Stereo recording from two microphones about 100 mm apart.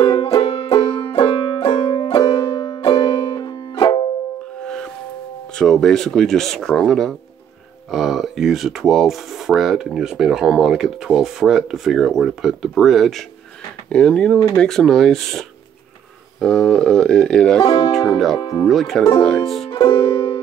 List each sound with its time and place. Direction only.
0.0 s music: 60° left (ahead or behind)
2.2 s banjo: 70° left (ahead or behind)
2.8 s music: 65° left (ahead or behind)
3.3 s music: 50° left (ahead or behind)
4.6 s music: 10° left (ahead or behind)
5.6 s speech: 5° left (ahead or behind)
13.8 s a sound: 10° left (ahead or behind)
14.5 s speech: 5° left (ahead or behind)
16.3 s a sound: 5° left (ahead or behind)
17.6 s speech: 50° left (ahead or behind)
18.1 s speech: centre (ahead or behind)
19.7 s music: 50° left (ahead or behind)